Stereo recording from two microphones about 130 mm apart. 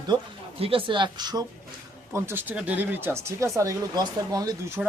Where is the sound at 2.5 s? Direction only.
10° right (ahead or behind).